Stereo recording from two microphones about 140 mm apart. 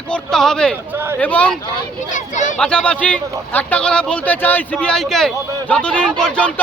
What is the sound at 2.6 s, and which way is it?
A man's voice, 5° left (ahead or behind).